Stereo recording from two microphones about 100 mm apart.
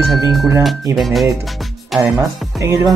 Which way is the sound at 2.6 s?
30° right (ahead or behind).